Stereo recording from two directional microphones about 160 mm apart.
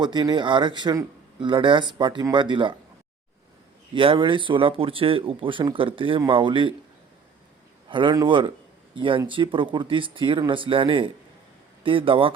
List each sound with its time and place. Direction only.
0.0 s speech: 25° right (ahead or behind)
3.9 s speech: 35° right (ahead or behind)
7.9 s speech: 30° right (ahead or behind)